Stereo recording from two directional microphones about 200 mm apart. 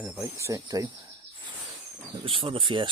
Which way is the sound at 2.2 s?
25° right (ahead or behind).